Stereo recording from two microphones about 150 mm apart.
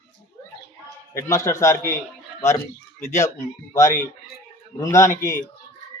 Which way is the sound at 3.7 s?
20° left (ahead or behind).